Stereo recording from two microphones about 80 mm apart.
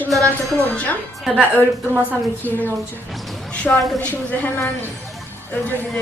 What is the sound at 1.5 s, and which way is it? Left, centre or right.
Speech, right.